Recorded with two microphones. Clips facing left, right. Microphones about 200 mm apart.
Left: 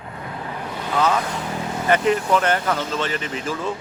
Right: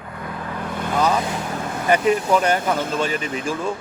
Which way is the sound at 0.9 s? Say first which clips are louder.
Even; 15° right (ahead or behind).